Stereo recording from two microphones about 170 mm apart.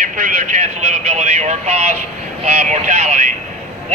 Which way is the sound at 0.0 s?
50° right (ahead or behind).